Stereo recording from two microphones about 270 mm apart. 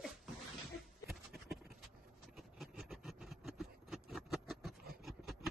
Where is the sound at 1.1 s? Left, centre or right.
Centre.